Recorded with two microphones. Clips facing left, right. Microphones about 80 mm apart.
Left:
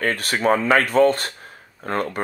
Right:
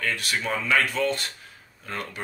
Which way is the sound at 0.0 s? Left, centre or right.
Left.